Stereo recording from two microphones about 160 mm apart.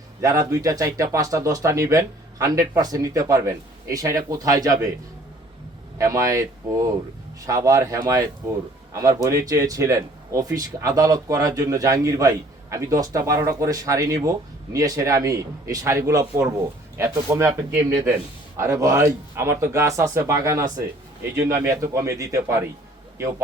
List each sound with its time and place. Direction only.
0.2 s speech: 20° right (ahead or behind)
6.0 s speech: 20° right (ahead or behind)